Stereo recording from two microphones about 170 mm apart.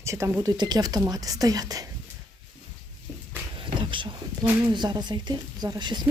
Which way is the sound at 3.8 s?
30° right (ahead or behind).